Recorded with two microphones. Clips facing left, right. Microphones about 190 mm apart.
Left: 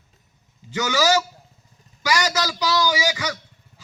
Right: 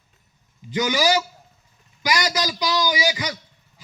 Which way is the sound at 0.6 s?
15° right (ahead or behind).